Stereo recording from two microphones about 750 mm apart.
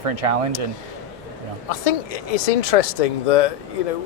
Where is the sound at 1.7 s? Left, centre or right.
Left.